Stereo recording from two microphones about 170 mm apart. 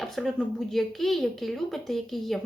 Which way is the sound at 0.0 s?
Centre (ahead or behind).